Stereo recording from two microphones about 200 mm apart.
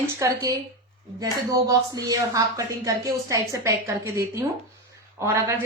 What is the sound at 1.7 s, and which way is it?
A woman's voice, 20° right (ahead or behind).